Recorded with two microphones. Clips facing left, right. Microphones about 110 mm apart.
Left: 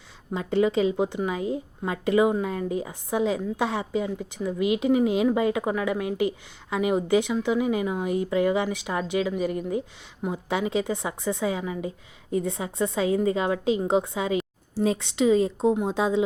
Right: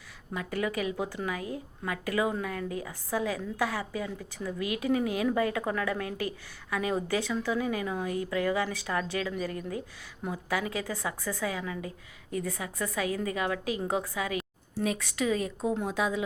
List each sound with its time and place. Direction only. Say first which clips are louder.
0.3 s a woman's voice: left 9 dB; 25° left (ahead or behind)